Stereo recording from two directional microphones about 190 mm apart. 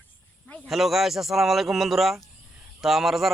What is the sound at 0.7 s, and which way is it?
A man's voice, centre (ahead or behind).